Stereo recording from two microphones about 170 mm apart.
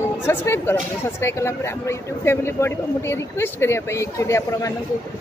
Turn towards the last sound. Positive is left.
turn(degrees=15)  # may be behind; listen again after turning